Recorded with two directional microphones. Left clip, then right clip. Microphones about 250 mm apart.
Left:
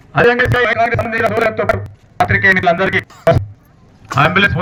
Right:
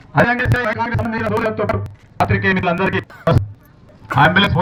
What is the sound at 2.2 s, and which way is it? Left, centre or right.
Speech, centre.